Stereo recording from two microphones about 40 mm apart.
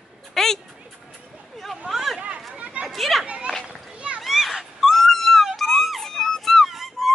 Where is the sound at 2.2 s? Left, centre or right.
Right.